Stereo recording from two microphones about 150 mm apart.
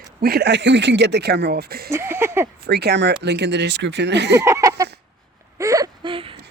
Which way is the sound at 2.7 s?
90° right.